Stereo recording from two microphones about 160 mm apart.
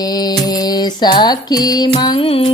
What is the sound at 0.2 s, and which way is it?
Music, 25° left (ahead or behind).